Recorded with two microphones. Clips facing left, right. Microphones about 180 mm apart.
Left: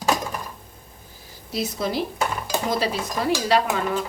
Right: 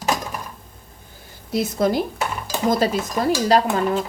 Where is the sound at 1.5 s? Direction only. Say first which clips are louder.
Right 6 dB; 50° right (ahead or behind).